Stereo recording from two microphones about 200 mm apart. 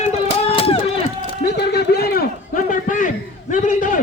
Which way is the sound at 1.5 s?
55° left (ahead or behind).